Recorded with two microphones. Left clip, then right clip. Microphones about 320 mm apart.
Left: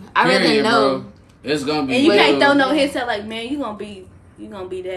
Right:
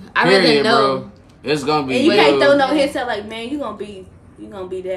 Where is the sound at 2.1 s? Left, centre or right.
Left.